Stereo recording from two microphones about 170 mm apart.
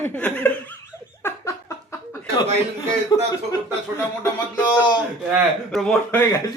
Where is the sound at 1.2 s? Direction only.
15° left (ahead or behind).